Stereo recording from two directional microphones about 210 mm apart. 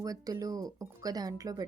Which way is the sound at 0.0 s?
15° right (ahead or behind).